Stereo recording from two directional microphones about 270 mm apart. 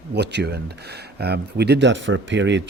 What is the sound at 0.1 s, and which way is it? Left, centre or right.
Speech, right.